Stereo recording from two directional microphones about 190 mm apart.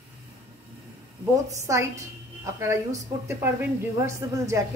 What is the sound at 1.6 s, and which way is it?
A woman's voice, 15° right (ahead or behind).